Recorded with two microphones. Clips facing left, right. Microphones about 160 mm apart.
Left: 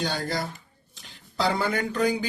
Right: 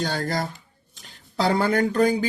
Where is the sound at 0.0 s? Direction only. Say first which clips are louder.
Right 3 dB; 50° right (ahead or behind).